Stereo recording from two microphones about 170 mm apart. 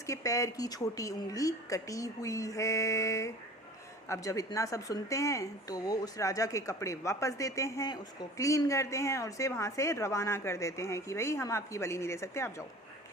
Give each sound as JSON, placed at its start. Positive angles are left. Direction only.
{"t": 0.1, "sound": "a woman's voice", "side_deg": 20}